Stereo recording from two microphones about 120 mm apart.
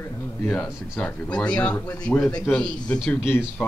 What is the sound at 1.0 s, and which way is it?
A man's voice, 10° left (ahead or behind).